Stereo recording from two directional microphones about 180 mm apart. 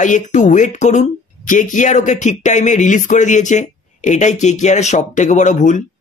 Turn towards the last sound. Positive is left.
turn(degrees=45)  # may be behind; listen again after turning